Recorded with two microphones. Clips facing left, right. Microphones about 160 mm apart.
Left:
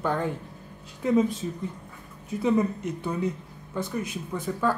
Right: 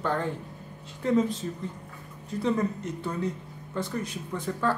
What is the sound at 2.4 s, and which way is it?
A woman's voice, 10° left (ahead or behind).